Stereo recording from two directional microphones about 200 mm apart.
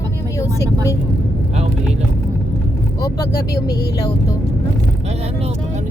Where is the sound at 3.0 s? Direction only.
20° left (ahead or behind).